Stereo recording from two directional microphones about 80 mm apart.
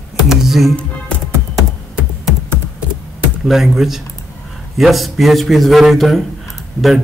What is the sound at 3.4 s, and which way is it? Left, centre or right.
Speech, centre.